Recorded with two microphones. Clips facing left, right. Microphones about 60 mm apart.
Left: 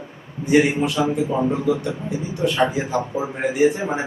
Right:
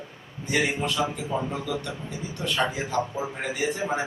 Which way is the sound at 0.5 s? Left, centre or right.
Left.